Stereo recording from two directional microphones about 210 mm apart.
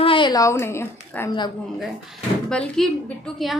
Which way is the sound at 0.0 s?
25° left (ahead or behind).